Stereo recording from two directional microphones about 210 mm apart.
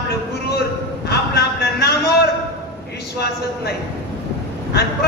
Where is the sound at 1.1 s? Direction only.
50° left (ahead or behind).